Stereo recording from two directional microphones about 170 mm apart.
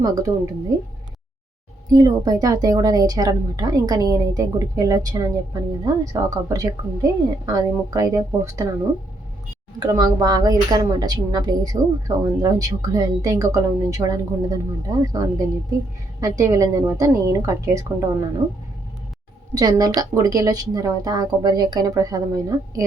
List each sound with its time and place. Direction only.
0.0 s a woman's voice: 20° right (ahead or behind)
1.9 s a woman's voice: 20° right (ahead or behind)
9.8 s a woman's voice: 20° right (ahead or behind)
19.5 s a woman's voice: 20° right (ahead or behind)